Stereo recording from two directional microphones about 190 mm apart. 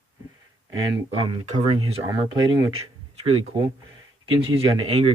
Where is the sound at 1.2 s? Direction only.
25° right (ahead or behind).